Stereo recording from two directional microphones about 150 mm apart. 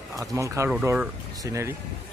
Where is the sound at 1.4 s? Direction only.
20° right (ahead or behind).